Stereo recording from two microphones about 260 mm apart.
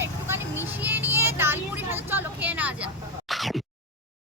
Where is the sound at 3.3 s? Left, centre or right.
Centre.